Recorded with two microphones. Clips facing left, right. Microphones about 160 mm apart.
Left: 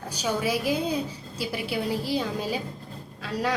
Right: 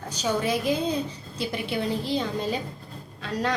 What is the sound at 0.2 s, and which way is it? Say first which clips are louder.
A woman's voice: right 1 dB; 5° left (ahead or behind).